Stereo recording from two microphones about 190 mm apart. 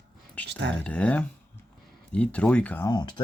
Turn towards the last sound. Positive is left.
turn(degrees=20)  # may be behind; listen again after turning